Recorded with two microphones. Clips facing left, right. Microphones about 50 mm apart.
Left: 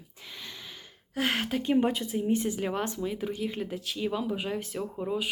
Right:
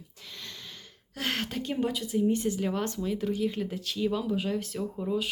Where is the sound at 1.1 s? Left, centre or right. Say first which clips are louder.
Left 3 dB; centre.